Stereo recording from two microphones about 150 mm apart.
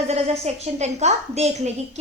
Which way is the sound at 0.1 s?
45° right (ahead or behind).